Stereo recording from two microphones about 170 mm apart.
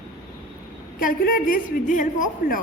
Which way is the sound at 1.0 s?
55° left (ahead or behind).